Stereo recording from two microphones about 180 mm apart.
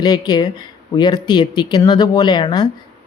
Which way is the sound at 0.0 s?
25° left (ahead or behind).